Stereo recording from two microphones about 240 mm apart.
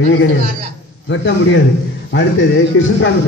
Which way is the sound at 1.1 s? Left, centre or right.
Left.